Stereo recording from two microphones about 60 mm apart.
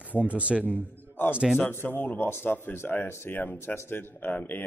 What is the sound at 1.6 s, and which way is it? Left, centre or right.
A man's voice, left.